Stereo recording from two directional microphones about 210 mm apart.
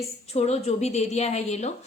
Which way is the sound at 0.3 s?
30° left (ahead or behind).